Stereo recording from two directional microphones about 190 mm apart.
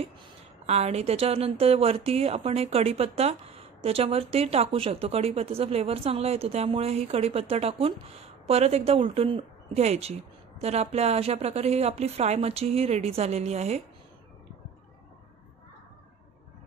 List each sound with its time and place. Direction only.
0.7 s a woman's voice: 35° right (ahead or behind)